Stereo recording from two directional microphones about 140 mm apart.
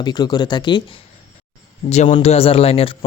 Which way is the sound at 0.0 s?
30° left (ahead or behind).